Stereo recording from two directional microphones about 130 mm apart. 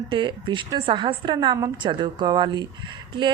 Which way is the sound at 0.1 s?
40° right (ahead or behind).